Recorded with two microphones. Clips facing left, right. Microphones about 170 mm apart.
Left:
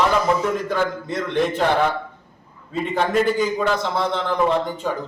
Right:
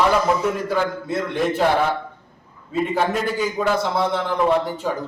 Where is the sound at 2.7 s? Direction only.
5° right (ahead or behind).